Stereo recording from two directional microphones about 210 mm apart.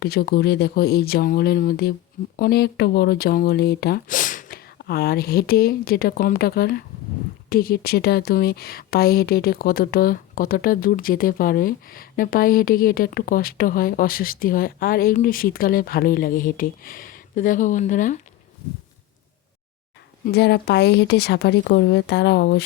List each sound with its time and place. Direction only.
0.0 s a woman's voice: 50° left (ahead or behind)
20.2 s a woman's voice: 50° left (ahead or behind)